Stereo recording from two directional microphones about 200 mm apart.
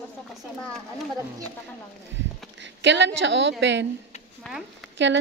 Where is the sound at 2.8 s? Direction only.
60° right (ahead or behind).